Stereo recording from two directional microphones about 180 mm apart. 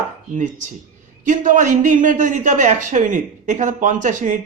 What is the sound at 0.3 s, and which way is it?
A woman's voice, 45° right (ahead or behind).